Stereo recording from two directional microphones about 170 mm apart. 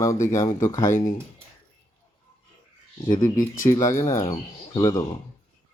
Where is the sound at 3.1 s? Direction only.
20° left (ahead or behind).